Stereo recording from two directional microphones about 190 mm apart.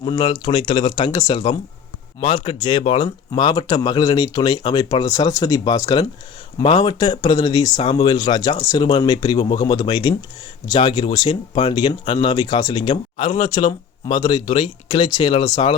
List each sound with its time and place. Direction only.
0.0 s speech: 25° left (ahead or behind)